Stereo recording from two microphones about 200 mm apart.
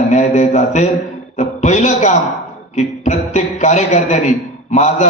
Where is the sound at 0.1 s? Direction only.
35° left (ahead or behind).